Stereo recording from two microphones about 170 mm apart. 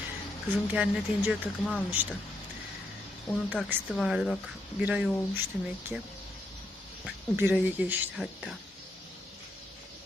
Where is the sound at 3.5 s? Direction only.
10° right (ahead or behind).